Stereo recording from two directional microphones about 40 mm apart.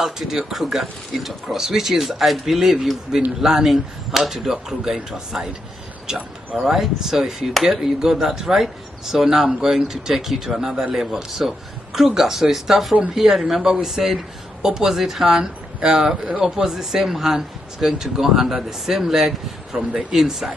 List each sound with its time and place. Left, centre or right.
0.0 s speech: centre
6.6 s speech: centre